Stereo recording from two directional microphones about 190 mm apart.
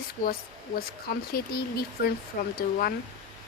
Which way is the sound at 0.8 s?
50° left (ahead or behind).